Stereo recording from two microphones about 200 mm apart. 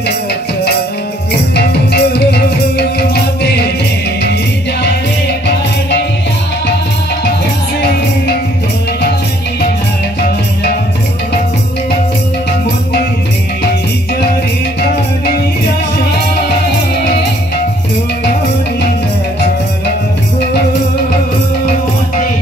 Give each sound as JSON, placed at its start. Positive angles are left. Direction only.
{"t": 1.5, "sound": "music", "side_deg": 55}